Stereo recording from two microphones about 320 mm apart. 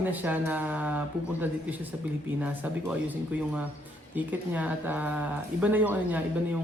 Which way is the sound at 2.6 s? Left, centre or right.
Centre.